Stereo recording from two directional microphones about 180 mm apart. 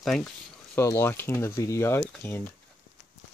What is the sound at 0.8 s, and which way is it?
Speech, 15° left (ahead or behind).